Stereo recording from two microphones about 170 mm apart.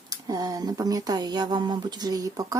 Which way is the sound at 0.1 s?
20° right (ahead or behind).